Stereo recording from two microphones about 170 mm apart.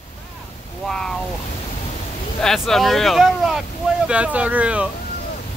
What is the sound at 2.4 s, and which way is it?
Speech, centre (ahead or behind).